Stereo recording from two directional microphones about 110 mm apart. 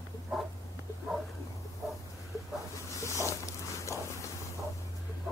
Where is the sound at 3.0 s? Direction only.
25° left (ahead or behind).